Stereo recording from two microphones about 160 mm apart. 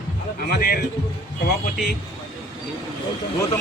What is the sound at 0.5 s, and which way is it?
Speech, 70° left (ahead or behind).